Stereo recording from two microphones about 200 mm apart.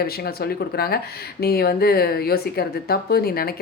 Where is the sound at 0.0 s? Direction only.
50° left (ahead or behind).